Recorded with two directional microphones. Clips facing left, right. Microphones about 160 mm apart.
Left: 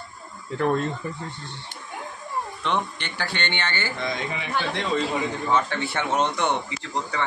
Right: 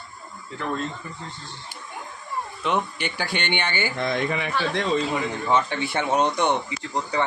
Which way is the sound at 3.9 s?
55° right (ahead or behind).